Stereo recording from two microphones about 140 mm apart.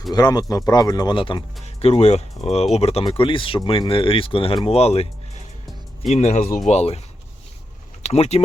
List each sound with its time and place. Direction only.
0.1 s speech: 30° left (ahead or behind)
1.6 s speech: 50° left (ahead or behind)
6.1 s speech: 55° left (ahead or behind)
8.0 s speech: 50° left (ahead or behind)